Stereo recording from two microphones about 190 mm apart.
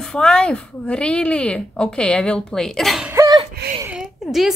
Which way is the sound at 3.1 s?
15° right (ahead or behind).